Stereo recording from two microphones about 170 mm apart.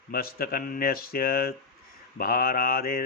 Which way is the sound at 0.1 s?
60° left (ahead or behind).